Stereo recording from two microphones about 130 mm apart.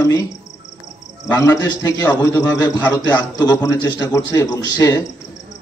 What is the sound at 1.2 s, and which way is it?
A man's voice, 25° left (ahead or behind).